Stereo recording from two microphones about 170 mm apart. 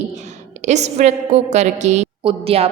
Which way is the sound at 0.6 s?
40° right (ahead or behind).